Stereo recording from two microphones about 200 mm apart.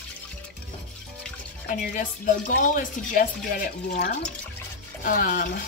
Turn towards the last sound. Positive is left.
turn(degrees=45)  # may be behind; listen again after turning